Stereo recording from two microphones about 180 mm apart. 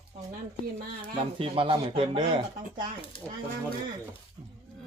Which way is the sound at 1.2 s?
30° right (ahead or behind).